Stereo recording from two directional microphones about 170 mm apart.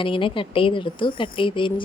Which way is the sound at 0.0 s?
30° left (ahead or behind).